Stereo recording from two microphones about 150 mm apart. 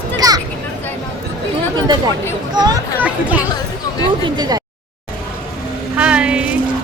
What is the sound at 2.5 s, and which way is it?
Speech, 25° right (ahead or behind).